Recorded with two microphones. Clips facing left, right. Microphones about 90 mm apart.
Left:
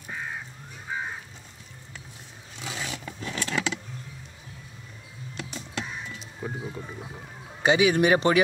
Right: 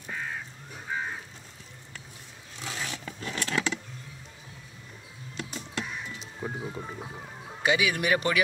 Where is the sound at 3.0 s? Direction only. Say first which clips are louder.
Left 2 dB; 5° left (ahead or behind).